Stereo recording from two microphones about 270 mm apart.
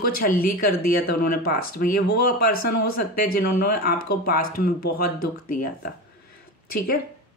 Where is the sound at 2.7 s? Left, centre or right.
Left.